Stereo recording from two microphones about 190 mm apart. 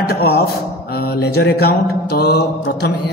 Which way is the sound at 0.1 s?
55° left (ahead or behind).